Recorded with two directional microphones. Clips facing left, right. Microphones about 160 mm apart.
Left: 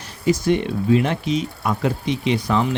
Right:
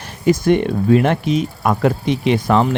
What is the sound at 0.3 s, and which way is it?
Speech, 55° right (ahead or behind).